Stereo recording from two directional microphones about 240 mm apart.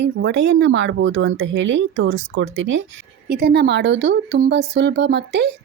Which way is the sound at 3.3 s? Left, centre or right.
Right.